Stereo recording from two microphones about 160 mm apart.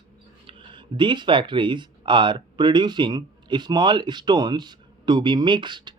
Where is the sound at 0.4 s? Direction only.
30° right (ahead or behind).